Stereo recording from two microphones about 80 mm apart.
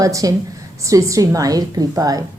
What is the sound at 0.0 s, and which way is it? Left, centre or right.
A woman's voice, right.